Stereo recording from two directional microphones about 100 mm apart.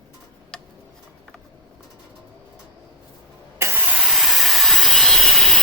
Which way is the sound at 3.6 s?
20° right (ahead or behind).